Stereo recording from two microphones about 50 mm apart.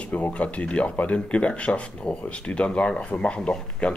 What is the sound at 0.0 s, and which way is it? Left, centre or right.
Speech, left.